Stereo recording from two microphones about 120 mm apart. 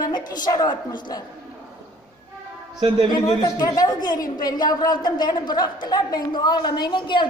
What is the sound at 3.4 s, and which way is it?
A woman's voice, 35° left (ahead or behind).